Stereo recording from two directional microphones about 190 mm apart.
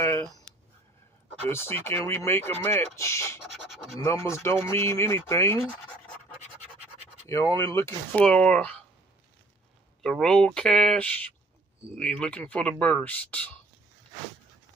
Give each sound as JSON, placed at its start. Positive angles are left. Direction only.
{"t": 0.0, "sound": "a sound", "side_deg": 15}
{"t": 1.5, "sound": "speech", "side_deg": 10}
{"t": 3.6, "sound": "scratch", "side_deg": 0}
{"t": 4.0, "sound": "speech", "side_deg": 15}
{"t": 7.2, "sound": "speech", "side_deg": 15}
{"t": 8.1, "sound": "speech", "side_deg": 5}
{"t": 10.0, "sound": "speech", "side_deg": 5}